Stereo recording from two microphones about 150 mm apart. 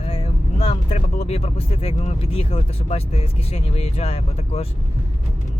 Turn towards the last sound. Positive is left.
turn(degrees=45)  # may be behind; listen again after turning